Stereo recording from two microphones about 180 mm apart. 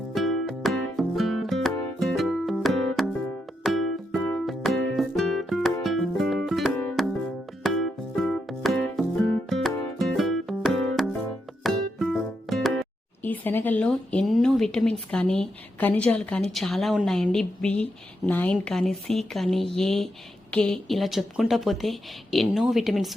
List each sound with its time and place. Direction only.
0.1 s music: centre (ahead or behind)
13.2 s a woman's voice: 10° left (ahead or behind)